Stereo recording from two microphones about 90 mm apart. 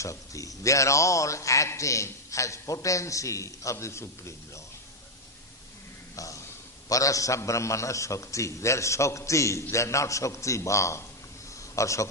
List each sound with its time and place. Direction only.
0.0 s a man's voice: 35° left (ahead or behind)
6.1 s a man's voice: 40° left (ahead or behind)